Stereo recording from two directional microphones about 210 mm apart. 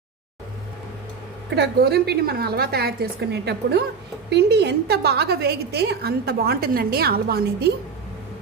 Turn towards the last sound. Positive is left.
turn(degrees=-50)  # may be behind; listen again after turning